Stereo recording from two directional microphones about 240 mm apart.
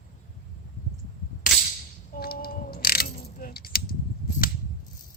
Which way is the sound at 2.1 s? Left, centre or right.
Left.